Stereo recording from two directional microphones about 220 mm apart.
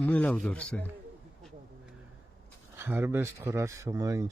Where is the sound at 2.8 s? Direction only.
10° right (ahead or behind).